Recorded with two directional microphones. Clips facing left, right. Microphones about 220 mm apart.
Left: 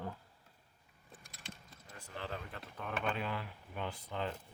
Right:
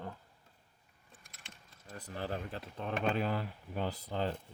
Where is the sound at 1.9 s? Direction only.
35° right (ahead or behind).